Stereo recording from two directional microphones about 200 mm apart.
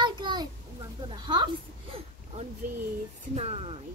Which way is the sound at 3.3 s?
30° right (ahead or behind).